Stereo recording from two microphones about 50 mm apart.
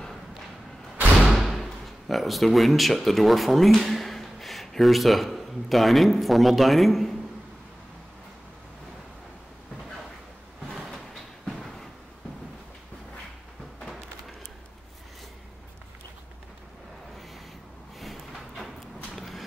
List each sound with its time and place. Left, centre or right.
1.3 s speech: centre
11.4 s train: centre
18.0 s a sound: centre
19.1 s walk: centre